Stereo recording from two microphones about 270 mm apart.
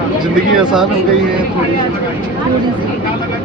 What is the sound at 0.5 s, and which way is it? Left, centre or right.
Speech, centre.